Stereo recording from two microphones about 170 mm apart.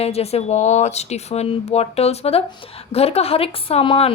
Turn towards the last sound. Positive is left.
turn(degrees=35)  # may be behind; listen again after turning